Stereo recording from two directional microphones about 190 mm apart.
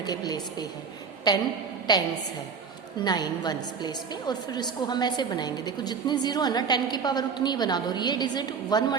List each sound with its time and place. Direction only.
0.0 s a woman's voice: 20° left (ahead or behind)